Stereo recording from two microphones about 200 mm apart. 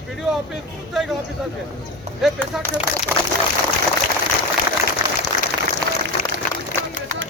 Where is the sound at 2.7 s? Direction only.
30° left (ahead or behind).